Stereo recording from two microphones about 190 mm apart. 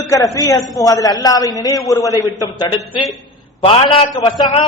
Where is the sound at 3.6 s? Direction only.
30° left (ahead or behind).